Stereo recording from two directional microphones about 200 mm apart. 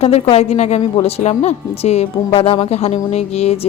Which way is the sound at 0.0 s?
30° left (ahead or behind).